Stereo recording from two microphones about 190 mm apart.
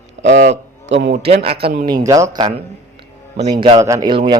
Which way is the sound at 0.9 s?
65° right (ahead or behind).